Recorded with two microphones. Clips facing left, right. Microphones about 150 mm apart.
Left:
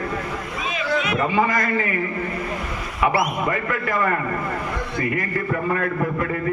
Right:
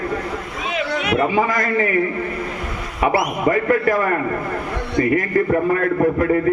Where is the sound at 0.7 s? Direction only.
70° right (ahead or behind).